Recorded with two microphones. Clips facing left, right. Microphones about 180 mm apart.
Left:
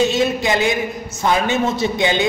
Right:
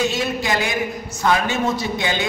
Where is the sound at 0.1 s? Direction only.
25° left (ahead or behind).